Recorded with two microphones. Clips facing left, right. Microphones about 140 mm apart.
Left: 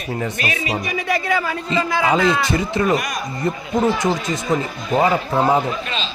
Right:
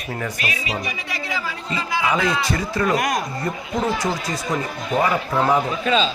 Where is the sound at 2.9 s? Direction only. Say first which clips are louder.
Even; 90° right.